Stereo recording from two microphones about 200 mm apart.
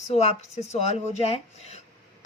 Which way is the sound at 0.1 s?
30° left (ahead or behind).